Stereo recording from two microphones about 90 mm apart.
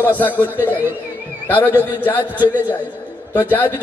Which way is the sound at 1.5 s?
20° left (ahead or behind).